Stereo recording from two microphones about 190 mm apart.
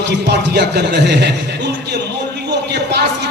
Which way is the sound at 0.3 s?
65° right (ahead or behind).